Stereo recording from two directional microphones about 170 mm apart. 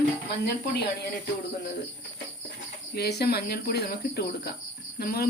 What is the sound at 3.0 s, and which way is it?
Speech, 70° left (ahead or behind).